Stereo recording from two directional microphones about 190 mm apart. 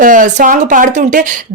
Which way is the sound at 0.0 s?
45° right (ahead or behind).